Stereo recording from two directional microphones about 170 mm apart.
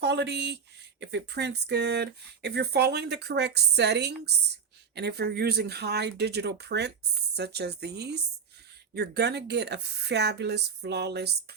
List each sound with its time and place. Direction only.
0.0 s speech: 80° right